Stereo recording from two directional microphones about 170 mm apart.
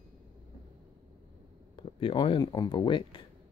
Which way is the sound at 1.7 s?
30° left (ahead or behind).